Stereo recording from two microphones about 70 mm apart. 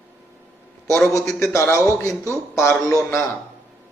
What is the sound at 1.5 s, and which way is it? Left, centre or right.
A man's voice, left.